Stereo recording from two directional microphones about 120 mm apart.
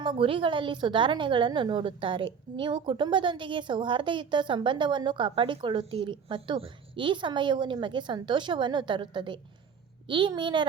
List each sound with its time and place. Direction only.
0.0 s a woman's voice: 45° right (ahead or behind)